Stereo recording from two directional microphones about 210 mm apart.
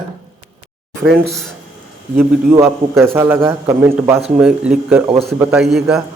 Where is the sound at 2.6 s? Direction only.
10° right (ahead or behind).